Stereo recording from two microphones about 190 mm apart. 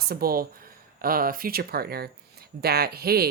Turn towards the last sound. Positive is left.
turn(degrees=-55)  # may be behind; listen again after turning